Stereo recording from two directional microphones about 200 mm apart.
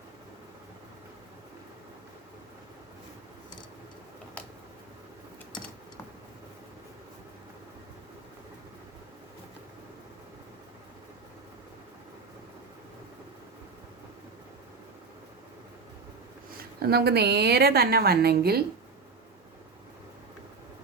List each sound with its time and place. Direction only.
16.8 s a woman's voice: 50° right (ahead or behind)